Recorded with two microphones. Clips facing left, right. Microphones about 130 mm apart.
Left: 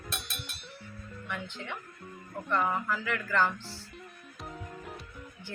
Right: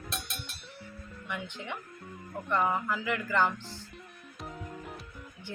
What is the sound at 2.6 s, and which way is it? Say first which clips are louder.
Music: right 1 dB; 10° right (ahead or behind).